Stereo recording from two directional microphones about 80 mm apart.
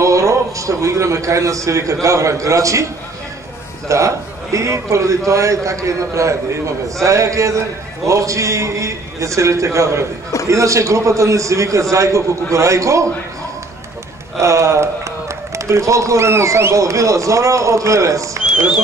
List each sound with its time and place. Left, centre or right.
0.0 s a man's voice: right
3.9 s a man's voice: right
14.4 s a man's voice: right